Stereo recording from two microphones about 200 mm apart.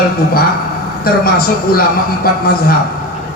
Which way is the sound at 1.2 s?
50° left (ahead or behind).